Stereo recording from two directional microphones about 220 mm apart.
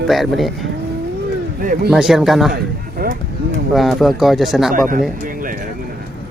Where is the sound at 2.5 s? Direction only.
45° right (ahead or behind).